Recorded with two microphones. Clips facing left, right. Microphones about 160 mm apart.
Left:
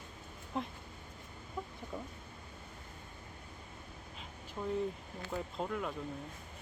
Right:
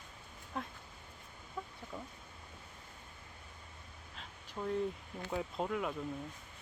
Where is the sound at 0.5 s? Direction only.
25° left (ahead or behind).